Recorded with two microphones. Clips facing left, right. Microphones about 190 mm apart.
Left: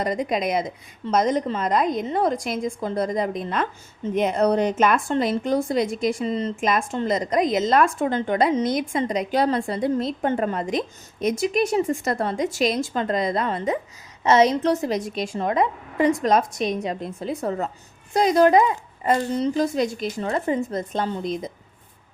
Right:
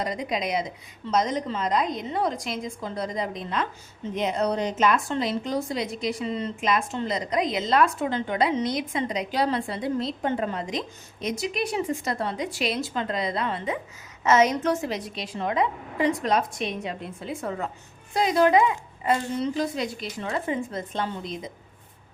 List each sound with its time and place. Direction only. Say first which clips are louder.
0.0 s speech: left 5 dB; 50° left (ahead or behind)
14.3 s a woman's voice: left 3 dB; 35° left (ahead or behind)